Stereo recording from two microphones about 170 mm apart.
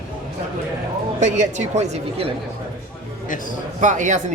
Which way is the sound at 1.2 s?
45° right (ahead or behind).